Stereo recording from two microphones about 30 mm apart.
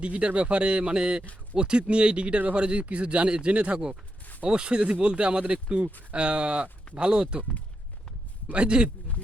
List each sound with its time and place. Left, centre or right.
0.0 s speech: right
4.4 s speech: right
8.5 s speech: right